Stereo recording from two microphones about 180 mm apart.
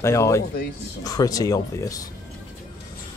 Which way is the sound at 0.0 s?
15° left (ahead or behind).